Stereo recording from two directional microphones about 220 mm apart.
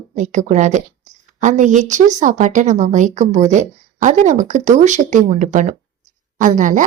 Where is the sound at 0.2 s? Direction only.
35° right (ahead or behind).